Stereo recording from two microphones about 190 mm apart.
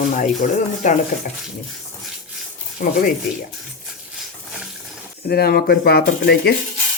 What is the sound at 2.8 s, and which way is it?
Speech, 45° left (ahead or behind).